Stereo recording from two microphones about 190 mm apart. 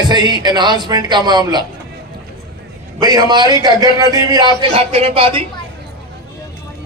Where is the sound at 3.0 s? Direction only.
20° right (ahead or behind).